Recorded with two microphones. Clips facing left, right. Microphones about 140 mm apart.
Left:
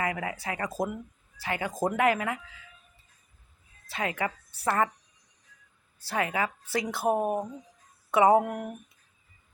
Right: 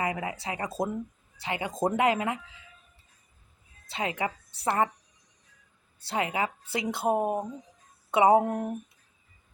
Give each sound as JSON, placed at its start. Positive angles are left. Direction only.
{"t": 0.0, "sound": "speech", "side_deg": -20}
{"t": 3.8, "sound": "speech", "side_deg": -25}
{"t": 6.1, "sound": "speech", "side_deg": -20}